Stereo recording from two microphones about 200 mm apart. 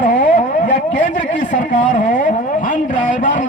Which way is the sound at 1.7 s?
40° left (ahead or behind).